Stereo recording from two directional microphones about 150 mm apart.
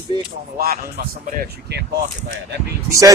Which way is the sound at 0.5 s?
90° right.